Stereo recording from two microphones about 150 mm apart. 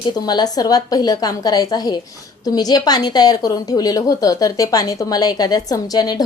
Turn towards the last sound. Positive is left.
turn(degrees=25)  # may be behind; listen again after turning